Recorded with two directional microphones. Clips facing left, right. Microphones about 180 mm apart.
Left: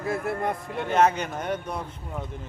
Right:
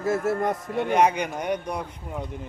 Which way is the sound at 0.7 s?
15° right (ahead or behind).